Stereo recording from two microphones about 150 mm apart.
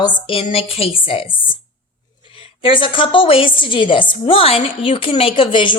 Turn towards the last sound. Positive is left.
turn(degrees=35)  # may be behind; listen again after turning